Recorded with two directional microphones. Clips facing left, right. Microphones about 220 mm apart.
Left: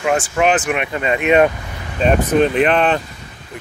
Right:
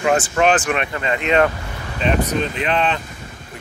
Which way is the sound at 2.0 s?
50° left (ahead or behind).